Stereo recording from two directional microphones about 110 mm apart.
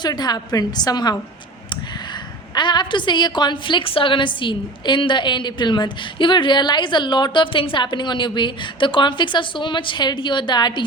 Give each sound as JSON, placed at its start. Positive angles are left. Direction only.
{"t": 0.0, "sound": "a woman's voice", "side_deg": 40}
{"t": 2.6, "sound": "a woman's voice", "side_deg": 45}